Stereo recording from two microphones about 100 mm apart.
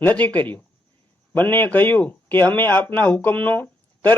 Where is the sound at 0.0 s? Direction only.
15° left (ahead or behind).